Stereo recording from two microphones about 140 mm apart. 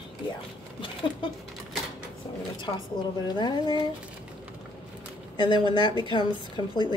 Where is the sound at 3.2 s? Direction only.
30° left (ahead or behind).